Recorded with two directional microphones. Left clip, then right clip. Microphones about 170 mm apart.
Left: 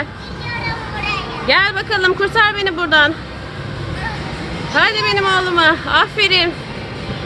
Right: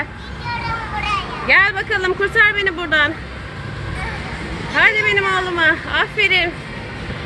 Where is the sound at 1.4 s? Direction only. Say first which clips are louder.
Even; 15° left (ahead or behind).